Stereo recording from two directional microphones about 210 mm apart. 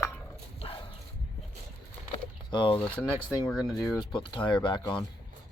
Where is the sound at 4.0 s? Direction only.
20° left (ahead or behind).